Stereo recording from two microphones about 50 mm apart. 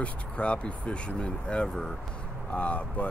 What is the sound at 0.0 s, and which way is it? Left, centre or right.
Speech, left.